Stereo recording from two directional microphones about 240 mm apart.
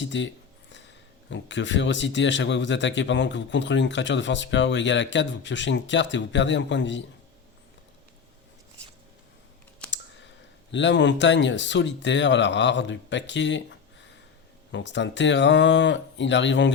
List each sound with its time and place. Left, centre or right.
0.0 s a sound: left
1.3 s speech: left
9.9 s speech: left